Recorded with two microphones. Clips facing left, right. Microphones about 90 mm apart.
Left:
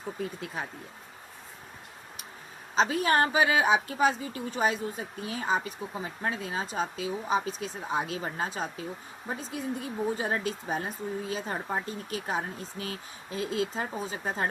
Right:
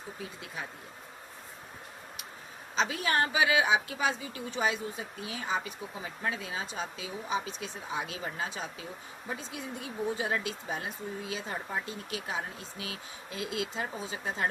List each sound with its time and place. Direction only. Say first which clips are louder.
2.7 s a woman's voice: left 5 dB; 40° left (ahead or behind)